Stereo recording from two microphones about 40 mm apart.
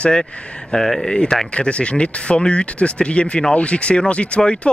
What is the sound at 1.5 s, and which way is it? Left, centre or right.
Speech, left.